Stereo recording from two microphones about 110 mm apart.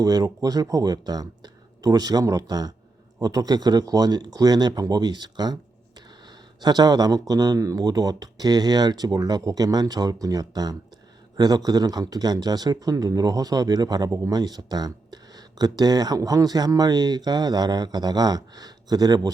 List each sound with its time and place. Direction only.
0.0 s speech: 35° right (ahead or behind)
6.6 s speech: 40° right (ahead or behind)